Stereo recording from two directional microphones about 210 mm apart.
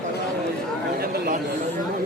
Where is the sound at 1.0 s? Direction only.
45° right (ahead or behind).